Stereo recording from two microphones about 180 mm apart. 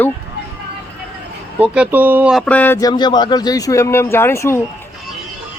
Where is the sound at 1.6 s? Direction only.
10° right (ahead or behind); by 4.6 s 15° left (ahead or behind).